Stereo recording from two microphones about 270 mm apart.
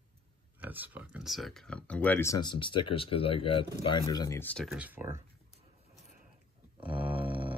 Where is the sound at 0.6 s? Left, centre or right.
Centre.